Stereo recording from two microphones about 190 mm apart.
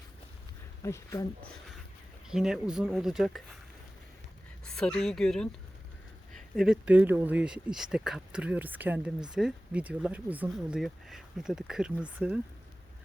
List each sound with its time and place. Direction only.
0.8 s speech: 15° left (ahead or behind)
2.2 s speech: 5° right (ahead or behind)
4.6 s speech: 5° left (ahead or behind)